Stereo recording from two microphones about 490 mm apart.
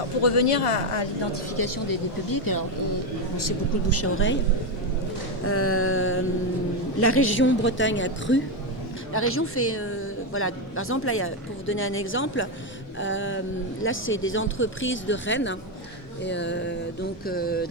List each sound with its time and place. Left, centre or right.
0.2 s speech: left
1.5 s speech: left
5.5 s speech: left
17.2 s a sound: centre